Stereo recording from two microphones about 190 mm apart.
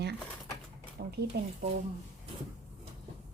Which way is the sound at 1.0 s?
60° right (ahead or behind).